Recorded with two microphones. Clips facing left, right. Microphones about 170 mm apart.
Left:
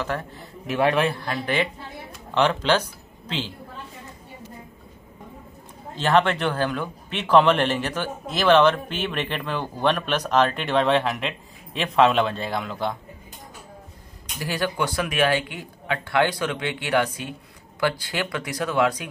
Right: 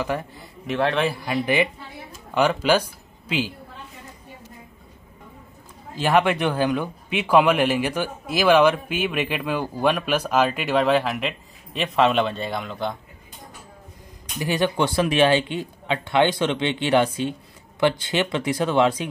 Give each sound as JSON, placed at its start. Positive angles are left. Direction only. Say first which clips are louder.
{"t": 0.0, "sound": "a man's voice", "louder": "right 2 dB", "side_deg": -15}
{"t": 0.7, "sound": "a man's voice", "louder": "left 1 dB", "side_deg": 10}
{"t": 1.0, "sound": "speech", "louder": "right 2 dB", "side_deg": -10}
{"t": 5.9, "sound": "speech", "louder": "right 1 dB", "side_deg": -10}
{"t": 14.4, "sound": "speech", "louder": "right 4 dB", "side_deg": -20}